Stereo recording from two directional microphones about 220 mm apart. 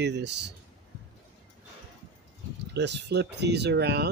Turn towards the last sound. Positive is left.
turn(degrees=-50)  # may be behind; listen again after turning